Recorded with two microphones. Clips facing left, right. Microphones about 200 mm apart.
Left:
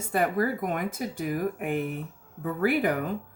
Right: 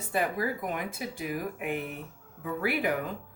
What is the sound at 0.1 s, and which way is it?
Speech, 50° left (ahead or behind).